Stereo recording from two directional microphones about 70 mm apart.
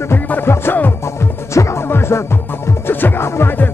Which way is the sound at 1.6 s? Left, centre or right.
Left.